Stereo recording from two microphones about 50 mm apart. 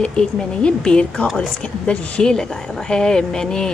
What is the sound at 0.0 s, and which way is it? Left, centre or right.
A woman's voice, centre.